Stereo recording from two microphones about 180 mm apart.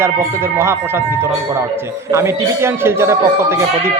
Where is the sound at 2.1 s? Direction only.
15° right (ahead or behind).